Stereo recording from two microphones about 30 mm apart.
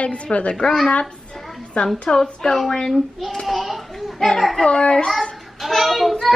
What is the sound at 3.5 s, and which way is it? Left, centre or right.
Speech, centre.